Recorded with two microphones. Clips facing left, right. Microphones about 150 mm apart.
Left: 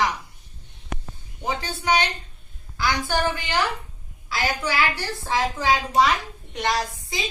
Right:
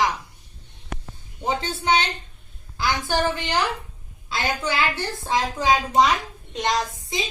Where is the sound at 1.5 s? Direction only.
25° right (ahead or behind).